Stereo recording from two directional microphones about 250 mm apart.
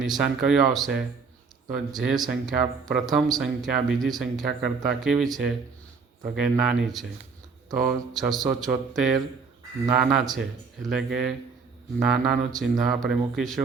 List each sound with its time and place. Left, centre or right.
0.0 s speech: centre